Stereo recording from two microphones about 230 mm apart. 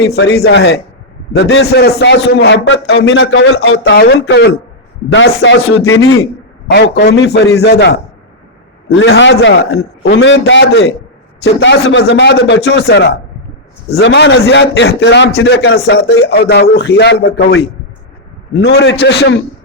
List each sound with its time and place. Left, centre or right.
0.0 s a man's voice: left
6.7 s a man's voice: left
9.7 s a man's voice: left
13.9 s a man's voice: left